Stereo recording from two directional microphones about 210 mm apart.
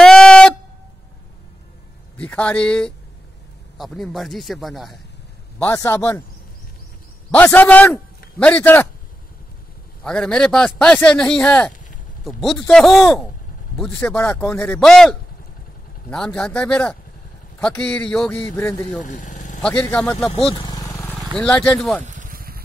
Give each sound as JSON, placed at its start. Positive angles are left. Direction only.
{"t": 0.0, "sound": "a sound", "side_deg": 5}
{"t": 2.1, "sound": "a man's voice", "side_deg": 5}
{"t": 5.6, "sound": "a man's voice", "side_deg": 10}
{"t": 7.2, "sound": "a man's voice", "side_deg": 10}
{"t": 10.0, "sound": "a man's voice", "side_deg": 5}
{"t": 19.0, "sound": "a sound", "side_deg": 35}
{"t": 19.6, "sound": "a man's voice", "side_deg": 5}
{"t": 20.3, "sound": "vehicle", "side_deg": 25}
{"t": 21.1, "sound": "vehicle", "side_deg": -15}
{"t": 21.4, "sound": "a man's voice", "side_deg": 5}
{"t": 22.0, "sound": "a sound", "side_deg": -35}